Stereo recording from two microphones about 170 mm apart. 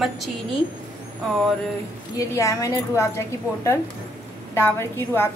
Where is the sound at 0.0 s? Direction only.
Centre (ahead or behind).